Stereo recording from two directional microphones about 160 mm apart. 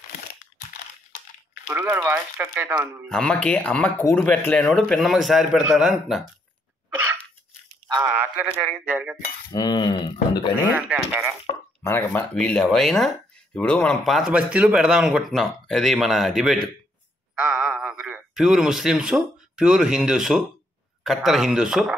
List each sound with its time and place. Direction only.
1.7 s speech: 15° right (ahead or behind)
3.1 s a man's voice: 5° left (ahead or behind)
8.0 s a sound: 10° right (ahead or behind)
8.8 s speech: 5° right (ahead or behind)
9.5 s a sound: 25° left (ahead or behind)
11.1 s speech: 10° right (ahead or behind)
11.8 s a man's voice: 15° left (ahead or behind); by 21.9 s 5° right (ahead or behind)